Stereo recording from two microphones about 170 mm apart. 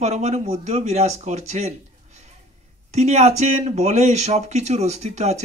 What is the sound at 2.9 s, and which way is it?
Speech, 40° right (ahead or behind).